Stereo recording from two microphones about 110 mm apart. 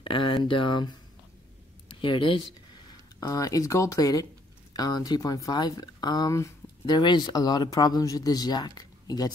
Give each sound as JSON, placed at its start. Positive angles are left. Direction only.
{"t": 0.0, "sound": "speech", "side_deg": 50}
{"t": 3.2, "sound": "speech", "side_deg": 30}